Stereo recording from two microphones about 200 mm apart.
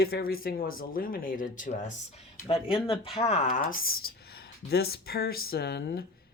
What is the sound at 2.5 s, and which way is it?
Speech, 30° left (ahead or behind).